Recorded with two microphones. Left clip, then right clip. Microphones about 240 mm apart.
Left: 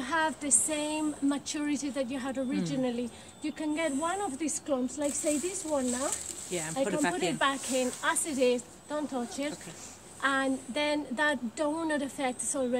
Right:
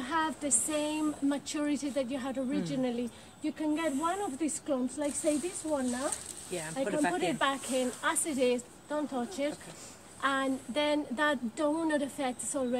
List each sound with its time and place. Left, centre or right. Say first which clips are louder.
0.0 s a woman's voice: left 2 dB; centre
6.5 s speech: left 2 dB; left
7.2 s a woman's voice: left 1 dB; centre